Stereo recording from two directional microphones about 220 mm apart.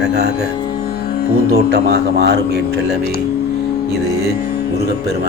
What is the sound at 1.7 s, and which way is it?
Speech, 50° right (ahead or behind).